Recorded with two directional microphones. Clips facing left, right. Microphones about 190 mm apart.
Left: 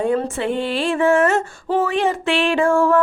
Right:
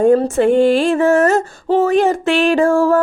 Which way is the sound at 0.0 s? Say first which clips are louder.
Right 8 dB; 45° right (ahead or behind).